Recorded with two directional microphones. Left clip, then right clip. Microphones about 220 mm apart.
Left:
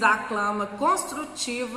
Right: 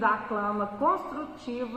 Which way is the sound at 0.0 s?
20° left (ahead or behind).